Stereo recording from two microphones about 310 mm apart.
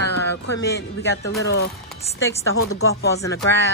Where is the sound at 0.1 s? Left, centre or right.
Left.